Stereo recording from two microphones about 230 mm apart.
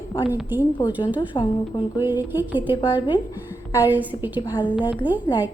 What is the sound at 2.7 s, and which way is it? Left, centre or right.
Speech, centre.